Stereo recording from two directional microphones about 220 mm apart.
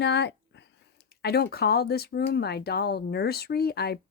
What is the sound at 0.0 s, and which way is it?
Speech, 50° left (ahead or behind).